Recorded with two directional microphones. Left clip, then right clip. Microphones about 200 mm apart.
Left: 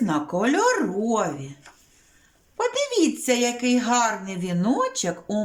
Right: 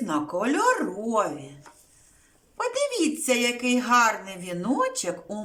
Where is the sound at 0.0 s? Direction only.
25° left (ahead or behind).